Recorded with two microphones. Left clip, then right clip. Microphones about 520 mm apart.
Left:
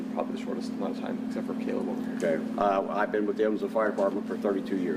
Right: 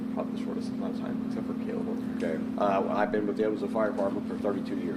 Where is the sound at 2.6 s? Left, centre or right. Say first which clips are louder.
Even; right.